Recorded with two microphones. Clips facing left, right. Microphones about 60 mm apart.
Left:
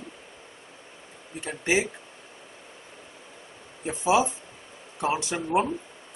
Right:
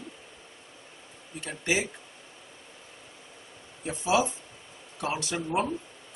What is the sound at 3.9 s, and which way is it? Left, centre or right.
A man's voice, left.